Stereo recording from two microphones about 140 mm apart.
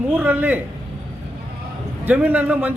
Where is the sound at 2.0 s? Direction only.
10° right (ahead or behind).